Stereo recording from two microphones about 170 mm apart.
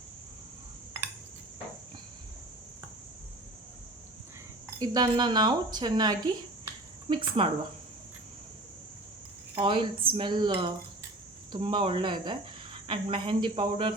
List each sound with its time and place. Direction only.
4.8 s speech: 25° right (ahead or behind)
9.6 s speech: 30° right (ahead or behind)